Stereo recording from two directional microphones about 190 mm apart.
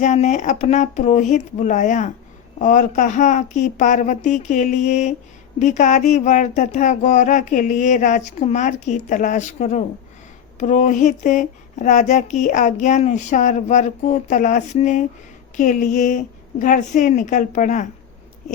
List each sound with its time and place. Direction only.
0.0 s speech: 40° left (ahead or behind)